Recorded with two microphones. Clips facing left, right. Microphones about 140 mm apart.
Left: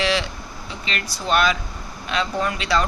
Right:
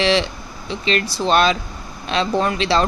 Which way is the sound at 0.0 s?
25° right (ahead or behind).